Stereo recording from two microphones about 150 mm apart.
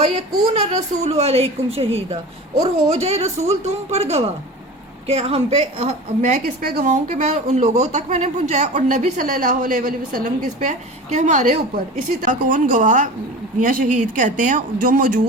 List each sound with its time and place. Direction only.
0.6 s a woman's voice: 45° right (ahead or behind)
6.2 s a woman's voice: 75° right (ahead or behind)